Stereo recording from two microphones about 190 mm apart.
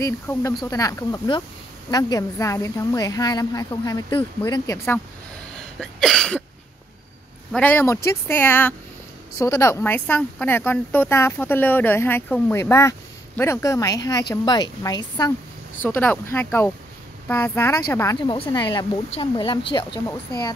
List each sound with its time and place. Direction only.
0.0 s a woman's voice: 15° left (ahead or behind)
5.8 s a sound: 5° left (ahead or behind)
7.5 s a woman's voice: 10° left (ahead or behind)
15.8 s a woman's voice: 10° left (ahead or behind)